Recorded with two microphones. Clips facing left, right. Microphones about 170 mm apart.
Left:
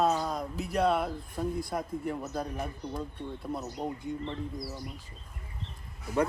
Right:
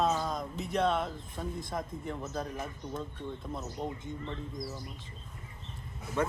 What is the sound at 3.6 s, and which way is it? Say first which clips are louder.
Speech: left 3 dB; 10° left (ahead or behind).